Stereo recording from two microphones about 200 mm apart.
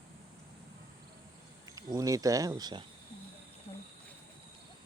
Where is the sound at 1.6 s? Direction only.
15° right (ahead or behind).